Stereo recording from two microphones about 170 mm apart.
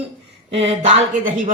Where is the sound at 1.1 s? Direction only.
50° right (ahead or behind).